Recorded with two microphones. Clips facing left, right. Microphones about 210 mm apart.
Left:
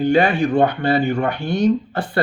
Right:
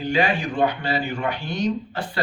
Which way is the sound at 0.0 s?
50° left (ahead or behind).